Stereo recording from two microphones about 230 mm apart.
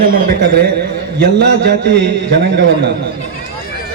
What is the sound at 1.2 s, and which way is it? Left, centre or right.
A man's voice, right.